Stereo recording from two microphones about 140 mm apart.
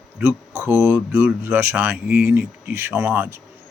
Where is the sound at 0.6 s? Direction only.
15° right (ahead or behind).